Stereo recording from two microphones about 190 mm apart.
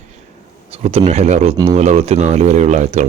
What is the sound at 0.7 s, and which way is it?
Speech, 30° right (ahead or behind).